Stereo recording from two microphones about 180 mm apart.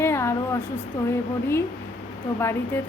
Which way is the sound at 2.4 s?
15° left (ahead or behind).